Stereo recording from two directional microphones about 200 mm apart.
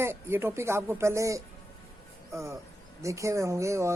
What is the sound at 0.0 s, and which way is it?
Speech, 10° right (ahead or behind).